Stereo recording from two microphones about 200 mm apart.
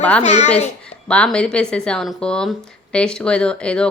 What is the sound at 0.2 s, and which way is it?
Speech, 35° left (ahead or behind).